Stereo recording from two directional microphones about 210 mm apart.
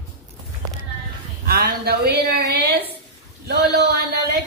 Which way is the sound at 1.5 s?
45° right (ahead or behind).